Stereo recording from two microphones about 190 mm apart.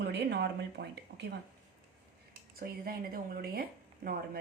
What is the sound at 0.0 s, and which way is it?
Speech, 60° right (ahead or behind).